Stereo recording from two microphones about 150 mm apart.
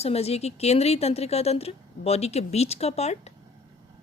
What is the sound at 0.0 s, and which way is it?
A woman's voice, 45° left (ahead or behind).